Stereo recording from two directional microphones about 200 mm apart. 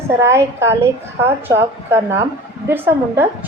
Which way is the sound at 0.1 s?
15° right (ahead or behind).